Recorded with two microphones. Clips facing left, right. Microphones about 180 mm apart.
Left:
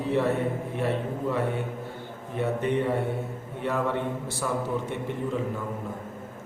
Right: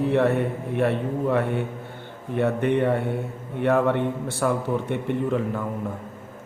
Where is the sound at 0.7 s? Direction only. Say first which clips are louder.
Right 9 dB; 60° right (ahead or behind).